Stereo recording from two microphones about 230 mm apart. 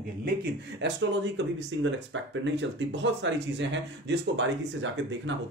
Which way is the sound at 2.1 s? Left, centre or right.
Right.